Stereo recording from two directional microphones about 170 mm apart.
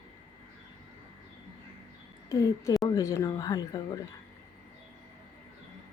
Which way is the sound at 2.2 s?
20° left (ahead or behind).